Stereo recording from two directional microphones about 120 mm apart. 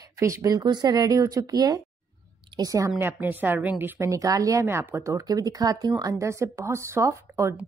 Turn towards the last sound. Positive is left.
turn(degrees=-25)  # may be behind; listen again after turning